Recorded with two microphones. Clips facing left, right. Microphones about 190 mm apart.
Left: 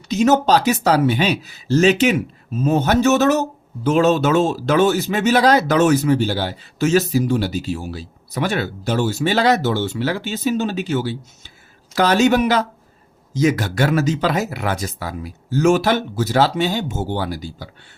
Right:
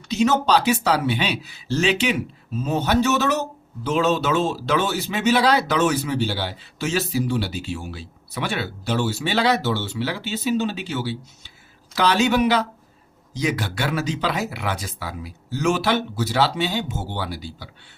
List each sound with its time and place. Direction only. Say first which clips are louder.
0.1 s speech: left 4 dB; 45° left (ahead or behind)